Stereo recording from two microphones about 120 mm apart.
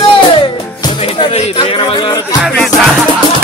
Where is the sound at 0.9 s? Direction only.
50° left (ahead or behind).